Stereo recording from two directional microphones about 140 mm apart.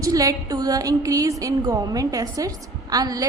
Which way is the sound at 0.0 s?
25° right (ahead or behind).